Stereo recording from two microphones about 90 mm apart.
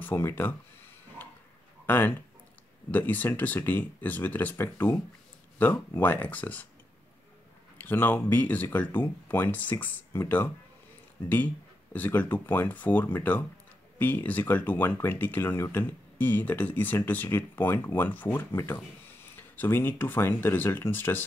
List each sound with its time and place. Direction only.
0.0 s speech: 25° left (ahead or behind)
1.2 s pig: 20° left (ahead or behind)
1.9 s speech: 20° left (ahead or behind)
7.7 s speech: 20° left (ahead or behind)